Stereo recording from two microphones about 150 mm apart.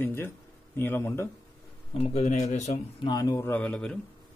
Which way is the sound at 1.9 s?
45° left (ahead or behind).